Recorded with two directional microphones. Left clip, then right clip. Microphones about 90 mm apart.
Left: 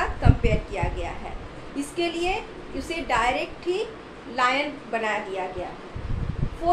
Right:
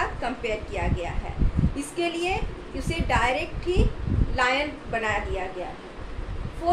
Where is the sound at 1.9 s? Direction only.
15° left (ahead or behind).